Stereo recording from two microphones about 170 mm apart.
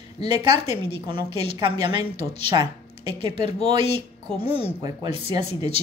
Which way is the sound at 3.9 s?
35° left (ahead or behind).